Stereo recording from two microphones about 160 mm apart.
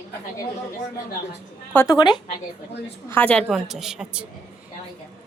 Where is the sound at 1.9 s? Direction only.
30° left (ahead or behind).